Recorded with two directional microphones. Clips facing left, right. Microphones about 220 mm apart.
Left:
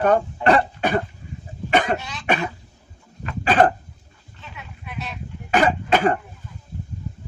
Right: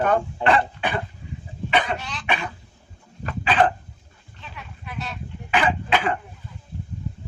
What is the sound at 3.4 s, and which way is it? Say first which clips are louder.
Cough: left 3 dB; 45° left (ahead or behind).